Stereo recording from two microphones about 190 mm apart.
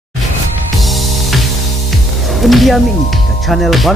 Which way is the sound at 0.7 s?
Centre (ahead or behind).